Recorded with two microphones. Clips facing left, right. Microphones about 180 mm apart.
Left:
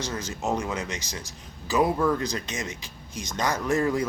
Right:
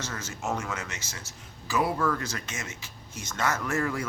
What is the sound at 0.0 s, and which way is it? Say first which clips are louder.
Speech: left 5 dB; 15° left (ahead or behind).